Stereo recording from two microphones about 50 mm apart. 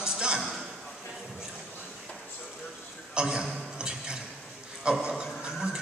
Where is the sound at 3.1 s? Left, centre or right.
Centre.